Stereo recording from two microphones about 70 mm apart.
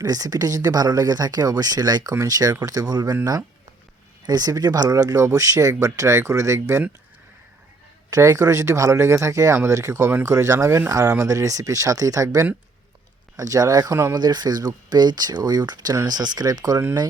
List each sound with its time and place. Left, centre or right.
0.0 s speech: right
2.1 s speech: right
4.3 s speech: right
8.1 s speech: right
14.2 s speech: right